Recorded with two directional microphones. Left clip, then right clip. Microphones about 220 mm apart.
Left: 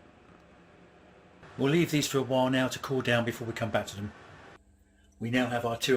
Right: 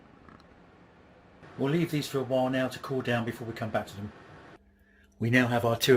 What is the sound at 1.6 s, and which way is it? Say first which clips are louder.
Speech: left 3 dB; 20° left (ahead or behind).